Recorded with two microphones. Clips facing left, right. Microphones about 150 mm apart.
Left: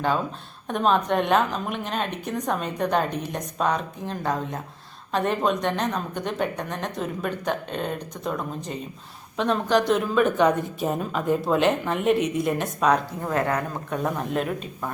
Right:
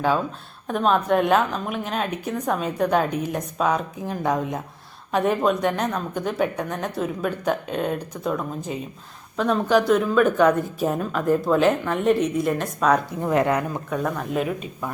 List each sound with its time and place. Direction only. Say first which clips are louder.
0.7 s a woman's voice: right 2 dB; centre (ahead or behind)
13.2 s speech: right 6 dB; 15° right (ahead or behind)
13.9 s a woman's voice: right 1 dB; centre (ahead or behind)